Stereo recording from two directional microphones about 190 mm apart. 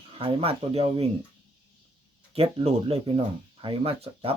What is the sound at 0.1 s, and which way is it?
Speech, 30° right (ahead or behind).